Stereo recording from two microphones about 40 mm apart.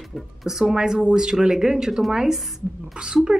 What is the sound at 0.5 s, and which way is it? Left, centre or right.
A woman's voice, centre.